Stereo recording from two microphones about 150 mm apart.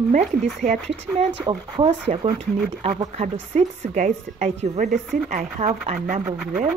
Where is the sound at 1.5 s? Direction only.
40° right (ahead or behind).